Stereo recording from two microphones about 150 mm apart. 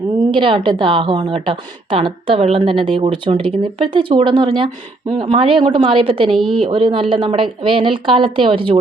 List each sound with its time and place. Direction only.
0.3 s a woman's voice: 35° right (ahead or behind)
6.3 s a woman's voice: centre (ahead or behind)
6.6 s a woman's voice: 35° right (ahead or behind)